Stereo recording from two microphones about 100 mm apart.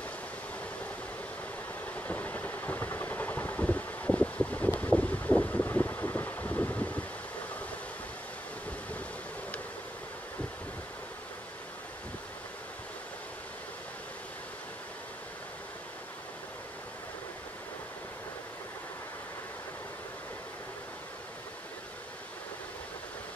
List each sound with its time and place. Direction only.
2.0 s vehicle: 15° left (ahead or behind)
4.7 s wind noise: 15° left (ahead or behind)